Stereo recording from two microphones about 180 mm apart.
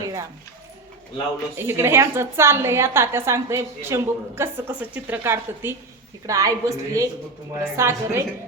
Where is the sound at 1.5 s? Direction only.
15° right (ahead or behind).